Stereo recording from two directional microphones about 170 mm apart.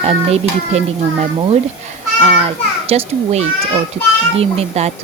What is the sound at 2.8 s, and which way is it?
Speech, 40° right (ahead or behind).